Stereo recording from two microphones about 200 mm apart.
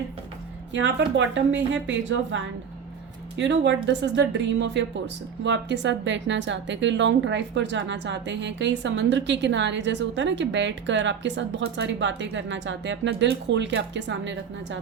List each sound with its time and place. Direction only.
0.7 s a woman's voice: 65° right (ahead or behind)